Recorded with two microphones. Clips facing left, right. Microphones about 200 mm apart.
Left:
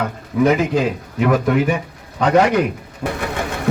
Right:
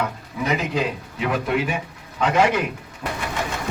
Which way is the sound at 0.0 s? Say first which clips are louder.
Left 9 dB; 50° left (ahead or behind).